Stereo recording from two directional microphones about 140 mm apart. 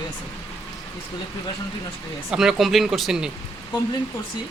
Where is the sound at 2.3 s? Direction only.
5° right (ahead or behind).